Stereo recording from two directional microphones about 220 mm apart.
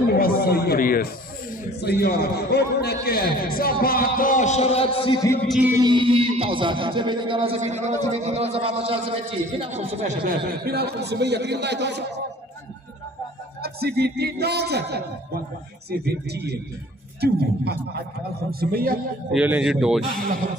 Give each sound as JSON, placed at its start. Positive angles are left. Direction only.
{"t": 0.1, "sound": "a man's voice", "side_deg": 45}
{"t": 5.5, "sound": "music", "side_deg": -5}
{"t": 5.8, "sound": "speech", "side_deg": -20}
{"t": 13.6, "sound": "a man's voice", "side_deg": -45}
{"t": 19.3, "sound": "speech", "side_deg": -5}